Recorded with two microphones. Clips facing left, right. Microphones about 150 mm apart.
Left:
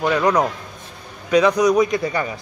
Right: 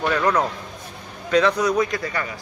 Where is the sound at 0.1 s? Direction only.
15° left (ahead or behind).